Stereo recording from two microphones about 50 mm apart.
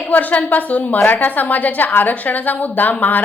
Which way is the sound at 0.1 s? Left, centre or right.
Left.